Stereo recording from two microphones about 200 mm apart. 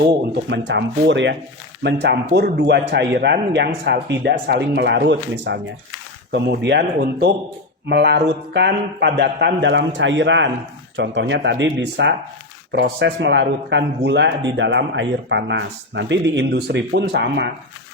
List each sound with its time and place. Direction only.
0.5 s a man's voice: 65° right (ahead or behind)